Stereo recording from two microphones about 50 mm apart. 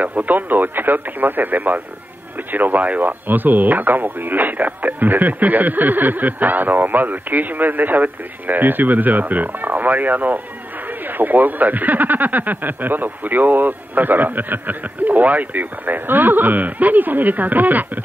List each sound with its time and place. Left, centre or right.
0.0 s speech: right